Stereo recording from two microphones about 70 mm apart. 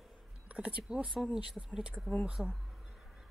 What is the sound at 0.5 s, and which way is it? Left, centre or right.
Speech, centre.